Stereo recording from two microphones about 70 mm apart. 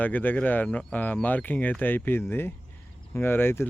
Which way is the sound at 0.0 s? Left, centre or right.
Left.